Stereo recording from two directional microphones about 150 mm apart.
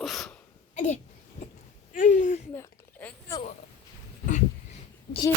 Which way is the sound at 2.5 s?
15° left (ahead or behind).